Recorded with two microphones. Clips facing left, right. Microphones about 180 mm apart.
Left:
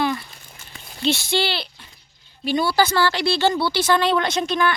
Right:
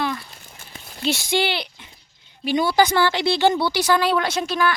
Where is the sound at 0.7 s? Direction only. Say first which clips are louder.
Left 2 dB; 10° right (ahead or behind).